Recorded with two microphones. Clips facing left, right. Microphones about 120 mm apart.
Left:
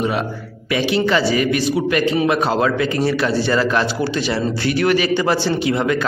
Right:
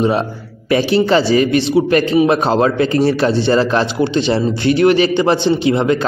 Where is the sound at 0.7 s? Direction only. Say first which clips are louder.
Right 5 dB; 35° right (ahead or behind).